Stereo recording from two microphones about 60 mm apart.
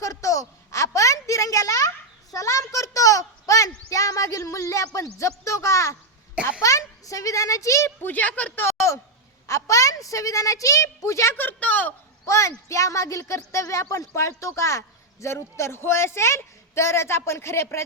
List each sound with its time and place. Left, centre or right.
0.0 s a sound: left
6.6 s a child's voice: left
8.0 s a woman's voice: left
8.5 s a sound: left
9.5 s a woman's voice: left
11.0 s speech: left
11.3 s a woman's voice: left
12.2 s speech: left
14.2 s a man's voice: left